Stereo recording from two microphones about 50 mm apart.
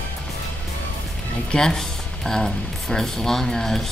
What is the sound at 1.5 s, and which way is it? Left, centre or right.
Speech, centre.